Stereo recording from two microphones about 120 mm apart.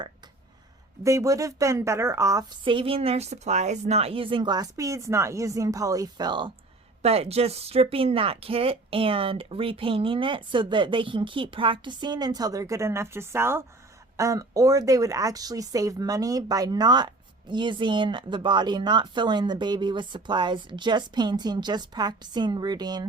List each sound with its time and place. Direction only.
1.0 s speech: 25° right (ahead or behind)
2.6 s speech: 50° right (ahead or behind)
7.0 s speech: 55° right (ahead or behind); by 23.0 s 35° right (ahead or behind)